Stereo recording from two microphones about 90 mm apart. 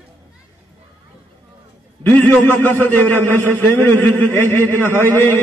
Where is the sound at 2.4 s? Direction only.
20° left (ahead or behind).